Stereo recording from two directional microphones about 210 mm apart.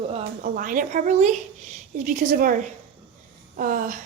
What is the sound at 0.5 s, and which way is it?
Speech, 40° right (ahead or behind).